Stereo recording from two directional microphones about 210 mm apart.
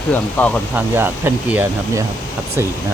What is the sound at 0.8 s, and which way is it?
Speech, 10° right (ahead or behind).